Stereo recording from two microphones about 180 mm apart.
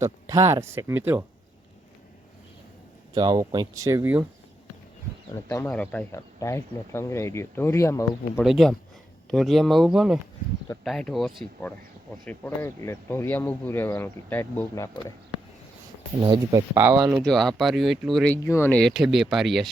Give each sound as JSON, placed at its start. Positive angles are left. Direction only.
{"t": 0.0, "sound": "speech", "side_deg": -20}
{"t": 3.2, "sound": "speech", "side_deg": -25}
{"t": 5.5, "sound": "speech", "side_deg": 10}
{"t": 8.4, "sound": "speech", "side_deg": 0}
{"t": 16.2, "sound": "speech", "side_deg": -20}
{"t": 17.1, "sound": "speech", "side_deg": 0}
{"t": 18.4, "sound": "speech", "side_deg": 15}